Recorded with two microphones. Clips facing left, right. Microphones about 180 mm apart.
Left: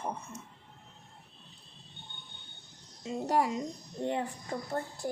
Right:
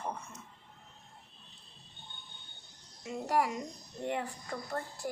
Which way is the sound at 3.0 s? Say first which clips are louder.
Left 2 dB; 25° left (ahead or behind).